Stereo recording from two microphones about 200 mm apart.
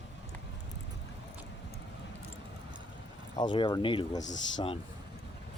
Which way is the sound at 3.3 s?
20° left (ahead or behind).